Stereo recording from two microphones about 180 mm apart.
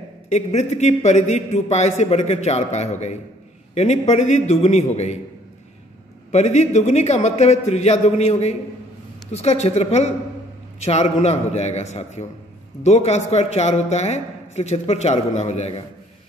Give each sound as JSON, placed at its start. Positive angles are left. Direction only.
{"t": 0.3, "sound": "a man's voice", "side_deg": 40}
{"t": 6.3, "sound": "a man's voice", "side_deg": 40}